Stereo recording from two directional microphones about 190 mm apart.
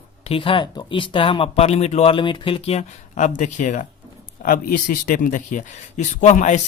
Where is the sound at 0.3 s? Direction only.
30° left (ahead or behind).